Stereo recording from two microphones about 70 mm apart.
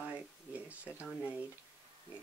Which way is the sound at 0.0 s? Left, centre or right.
Centre.